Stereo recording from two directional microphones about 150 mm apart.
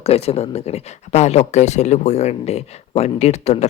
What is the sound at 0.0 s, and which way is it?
Speech, 45° left (ahead or behind).